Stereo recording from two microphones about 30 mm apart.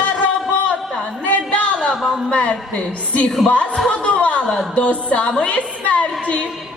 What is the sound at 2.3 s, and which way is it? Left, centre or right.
Speech, left.